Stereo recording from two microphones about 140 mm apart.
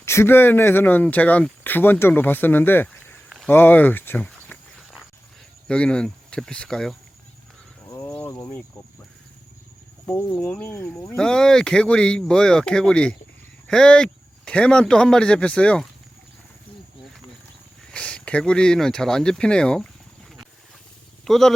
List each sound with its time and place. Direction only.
0.0 s speech: 20° left (ahead or behind)
3.2 s a sound: centre (ahead or behind)
3.5 s speech: 15° left (ahead or behind)
5.6 s speech: 10° left (ahead or behind)
7.9 s a sound: 15° left (ahead or behind)
10.1 s speech: 15° left (ahead or behind)
17.9 s speech: 10° left (ahead or behind)
21.2 s speech: 5° left (ahead or behind)